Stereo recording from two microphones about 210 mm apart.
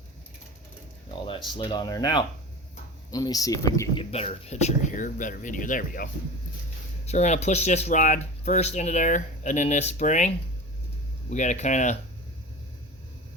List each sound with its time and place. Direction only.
1.5 s speech: 20° left (ahead or behind)
4.1 s speech: 30° left (ahead or behind)